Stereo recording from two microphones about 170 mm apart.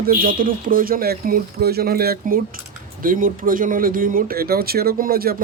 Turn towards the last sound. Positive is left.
turn(degrees=-60)  # may be behind; listen again after turning